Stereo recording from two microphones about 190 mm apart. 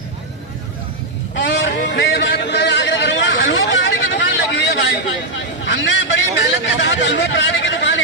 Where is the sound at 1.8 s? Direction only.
70° left (ahead or behind).